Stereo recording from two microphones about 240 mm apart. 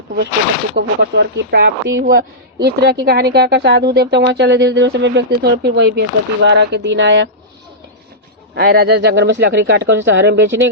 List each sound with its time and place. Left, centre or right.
0.8 s speech: right
8.5 s speech: right